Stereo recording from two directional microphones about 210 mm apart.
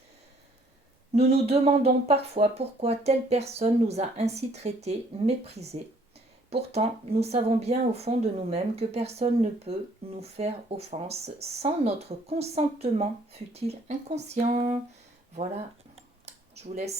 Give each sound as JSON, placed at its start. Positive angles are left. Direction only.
{"t": 1.1, "sound": "speech", "side_deg": -30}
{"t": 15.4, "sound": "cutlery", "side_deg": -30}